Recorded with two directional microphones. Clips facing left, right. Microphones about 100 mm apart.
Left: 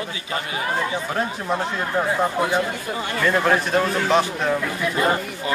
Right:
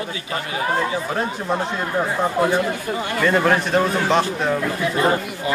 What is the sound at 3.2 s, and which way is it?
Speech, centre (ahead or behind).